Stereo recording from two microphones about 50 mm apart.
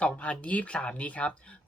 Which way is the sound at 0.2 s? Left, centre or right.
Left.